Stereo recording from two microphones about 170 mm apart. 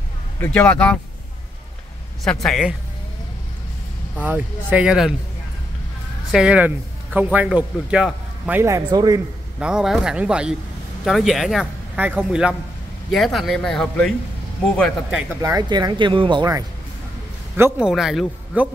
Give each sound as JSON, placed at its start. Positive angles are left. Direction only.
{"t": 0.4, "sound": "speech", "side_deg": 10}
{"t": 2.2, "sound": "a man's voice", "side_deg": 0}
{"t": 4.2, "sound": "a man's voice", "side_deg": -10}
{"t": 6.3, "sound": "a man's voice", "side_deg": -5}
{"t": 9.6, "sound": "a man's voice", "side_deg": -5}
{"t": 15.4, "sound": "speech", "side_deg": -20}
{"t": 17.6, "sound": "a man's voice", "side_deg": -10}